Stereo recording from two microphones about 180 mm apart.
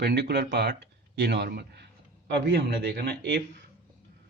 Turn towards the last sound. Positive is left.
turn(degrees=-65)  # may be behind; listen again after turning